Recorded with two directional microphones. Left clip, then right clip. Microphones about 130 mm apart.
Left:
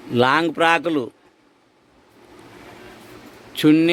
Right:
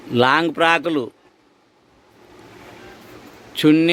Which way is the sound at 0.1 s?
Centre (ahead or behind).